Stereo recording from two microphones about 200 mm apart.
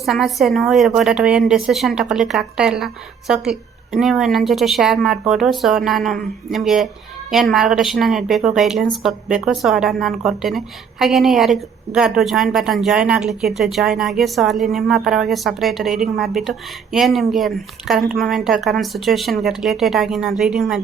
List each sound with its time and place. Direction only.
0.0 s speech: centre (ahead or behind)